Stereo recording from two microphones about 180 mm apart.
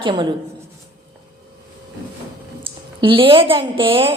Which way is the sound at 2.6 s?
30° right (ahead or behind).